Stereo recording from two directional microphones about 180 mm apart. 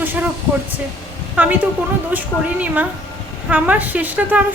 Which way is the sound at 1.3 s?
10° right (ahead or behind).